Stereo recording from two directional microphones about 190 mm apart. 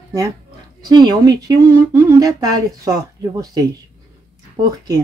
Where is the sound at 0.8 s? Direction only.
20° right (ahead or behind).